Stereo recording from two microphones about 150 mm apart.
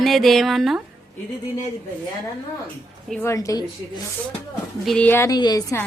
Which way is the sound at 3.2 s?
20° left (ahead or behind).